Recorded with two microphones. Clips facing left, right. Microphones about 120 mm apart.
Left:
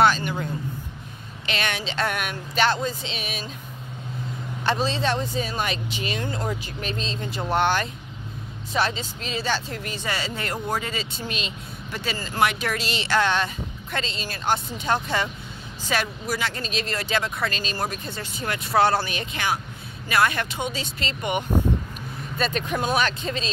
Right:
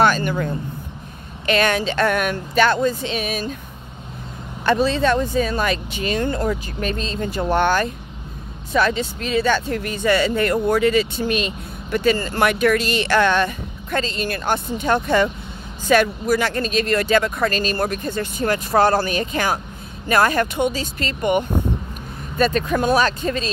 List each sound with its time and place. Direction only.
0.0 s speech: 50° right (ahead or behind)
4.6 s speech: 55° right (ahead or behind)
6.2 s speech: 65° right (ahead or behind)
6.8 s speech: 50° right (ahead or behind)
8.9 s speech: 60° right (ahead or behind)